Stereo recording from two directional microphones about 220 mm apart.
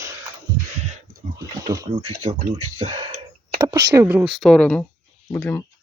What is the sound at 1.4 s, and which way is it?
Wild animals, 15° right (ahead or behind).